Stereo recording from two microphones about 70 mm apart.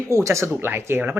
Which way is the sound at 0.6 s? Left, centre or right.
Right.